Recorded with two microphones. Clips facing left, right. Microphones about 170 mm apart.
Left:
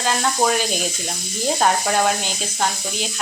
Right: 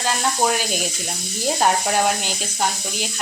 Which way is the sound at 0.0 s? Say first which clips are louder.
Left 1 dB; 5° right (ahead or behind).